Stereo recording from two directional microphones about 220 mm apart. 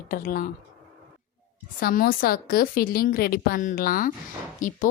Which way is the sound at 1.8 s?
40° left (ahead or behind).